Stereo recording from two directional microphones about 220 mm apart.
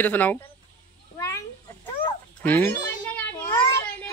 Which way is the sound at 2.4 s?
10° left (ahead or behind).